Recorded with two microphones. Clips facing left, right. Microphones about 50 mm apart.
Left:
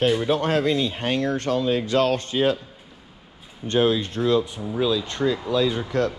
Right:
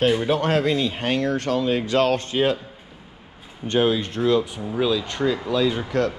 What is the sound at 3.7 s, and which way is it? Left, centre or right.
Speech, right.